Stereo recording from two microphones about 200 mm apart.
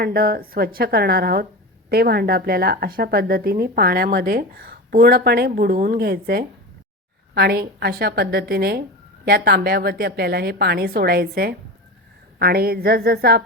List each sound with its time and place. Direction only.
0.0 s speech: 50° right (ahead or behind)